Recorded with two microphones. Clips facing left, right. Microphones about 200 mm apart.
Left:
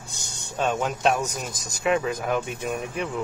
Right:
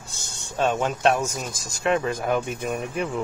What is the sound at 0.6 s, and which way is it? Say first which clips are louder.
Speech: right 2 dB; centre (ahead or behind).